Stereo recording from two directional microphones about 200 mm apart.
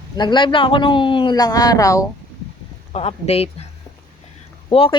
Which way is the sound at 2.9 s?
30° left (ahead or behind).